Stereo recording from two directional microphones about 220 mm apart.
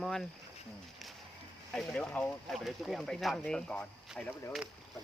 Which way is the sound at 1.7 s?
5° left (ahead or behind).